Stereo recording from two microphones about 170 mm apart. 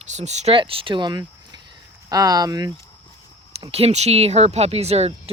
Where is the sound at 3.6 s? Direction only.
35° right (ahead or behind).